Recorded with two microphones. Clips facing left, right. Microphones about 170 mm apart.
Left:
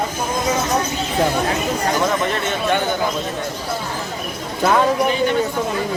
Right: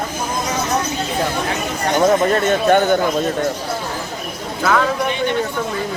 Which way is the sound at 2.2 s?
45° right (ahead or behind).